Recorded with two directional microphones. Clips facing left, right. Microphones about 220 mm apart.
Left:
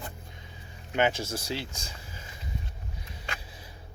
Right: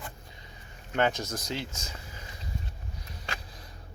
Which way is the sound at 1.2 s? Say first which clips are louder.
Left 1 dB; 10° left (ahead or behind).